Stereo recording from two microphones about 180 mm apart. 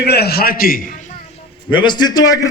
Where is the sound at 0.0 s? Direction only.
65° left (ahead or behind).